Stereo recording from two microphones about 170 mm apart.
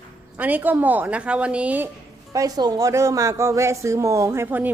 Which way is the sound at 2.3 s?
20° right (ahead or behind).